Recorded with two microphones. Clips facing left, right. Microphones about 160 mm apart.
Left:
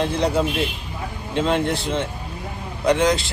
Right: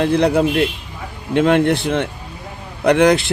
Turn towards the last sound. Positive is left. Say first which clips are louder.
# right 5 dB
turn(degrees=-60)  # may be behind; listen again after turning